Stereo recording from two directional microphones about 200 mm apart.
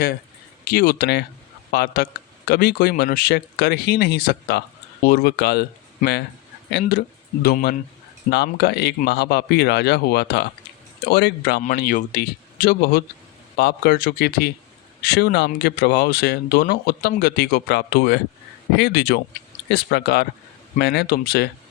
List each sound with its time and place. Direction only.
0.6 s speech: 50° left (ahead or behind)
11.6 s speech: 40° left (ahead or behind)